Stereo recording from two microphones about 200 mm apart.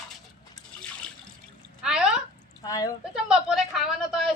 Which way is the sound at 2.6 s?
20° left (ahead or behind).